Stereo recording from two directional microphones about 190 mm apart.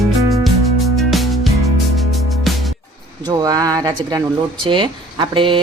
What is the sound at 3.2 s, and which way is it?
Speech, 20° right (ahead or behind).